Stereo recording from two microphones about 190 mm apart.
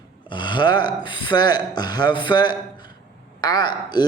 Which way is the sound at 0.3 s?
25° left (ahead or behind).